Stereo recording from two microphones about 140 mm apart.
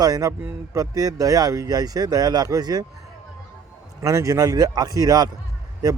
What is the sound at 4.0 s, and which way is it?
Speech, 20° right (ahead or behind).